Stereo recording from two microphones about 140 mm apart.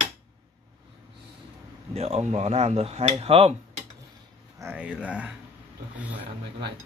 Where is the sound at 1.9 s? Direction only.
50° right (ahead or behind).